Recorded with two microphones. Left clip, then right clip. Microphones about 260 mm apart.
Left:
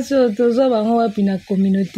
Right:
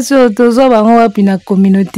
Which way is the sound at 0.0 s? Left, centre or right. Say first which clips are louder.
Right 7 dB; right.